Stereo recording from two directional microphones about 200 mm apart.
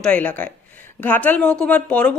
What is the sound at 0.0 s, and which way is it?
Speech, 5° left (ahead or behind).